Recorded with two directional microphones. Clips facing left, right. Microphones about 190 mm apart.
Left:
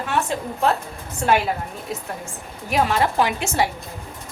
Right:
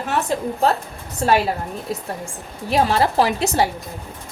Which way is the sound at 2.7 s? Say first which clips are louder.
Right 2 dB; 35° right (ahead or behind).